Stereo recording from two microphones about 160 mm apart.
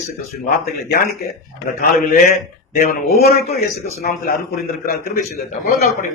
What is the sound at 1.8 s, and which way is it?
A man's voice, 65° left (ahead or behind).